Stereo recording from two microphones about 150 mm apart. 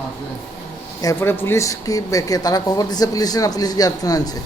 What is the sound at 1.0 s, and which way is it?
Speech, 15° left (ahead or behind).